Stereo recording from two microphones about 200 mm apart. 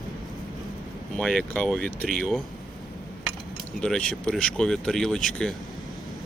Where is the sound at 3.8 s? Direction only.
5° left (ahead or behind).